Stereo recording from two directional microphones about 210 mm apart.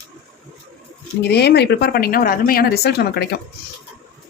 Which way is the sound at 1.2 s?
50° left (ahead or behind).